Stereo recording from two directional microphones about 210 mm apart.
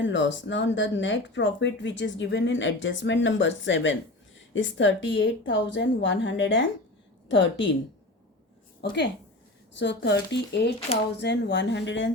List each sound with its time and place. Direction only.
0.0 s speech: 60° left (ahead or behind)
9.7 s speech: 55° left (ahead or behind)